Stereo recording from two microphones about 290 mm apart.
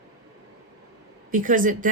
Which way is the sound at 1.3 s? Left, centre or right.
Right.